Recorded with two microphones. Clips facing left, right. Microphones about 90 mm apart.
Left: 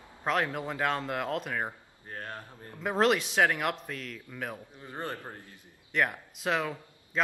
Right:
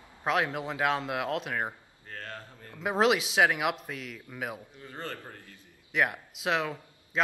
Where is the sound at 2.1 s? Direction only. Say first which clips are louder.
Left 1 dB; 20° left (ahead or behind).